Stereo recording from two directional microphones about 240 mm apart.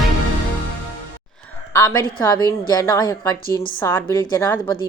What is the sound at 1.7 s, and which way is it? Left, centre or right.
Speech, centre.